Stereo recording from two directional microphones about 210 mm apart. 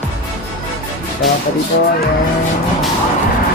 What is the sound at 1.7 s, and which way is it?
Speech, 55° left (ahead or behind).